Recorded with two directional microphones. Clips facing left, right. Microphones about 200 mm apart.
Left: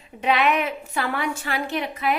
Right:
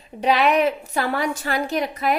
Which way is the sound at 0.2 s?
35° right (ahead or behind).